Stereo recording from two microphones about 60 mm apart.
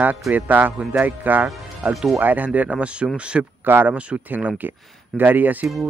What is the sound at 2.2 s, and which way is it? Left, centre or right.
Speech, right.